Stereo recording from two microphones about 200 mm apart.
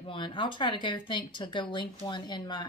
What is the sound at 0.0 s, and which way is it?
Speech, 25° left (ahead or behind).